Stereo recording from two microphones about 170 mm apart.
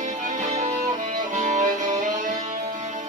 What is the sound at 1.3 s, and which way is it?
Music, 45° right (ahead or behind).